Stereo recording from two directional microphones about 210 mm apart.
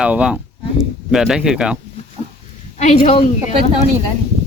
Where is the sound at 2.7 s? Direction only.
30° left (ahead or behind).